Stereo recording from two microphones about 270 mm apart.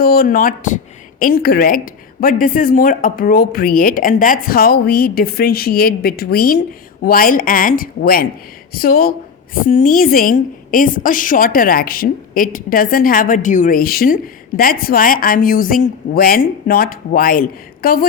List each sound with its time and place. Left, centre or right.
0.0 s a woman's voice: left